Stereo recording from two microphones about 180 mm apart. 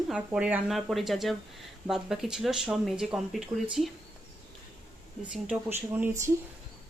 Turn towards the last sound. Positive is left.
turn(degrees=-15)  # may be behind; listen again after turning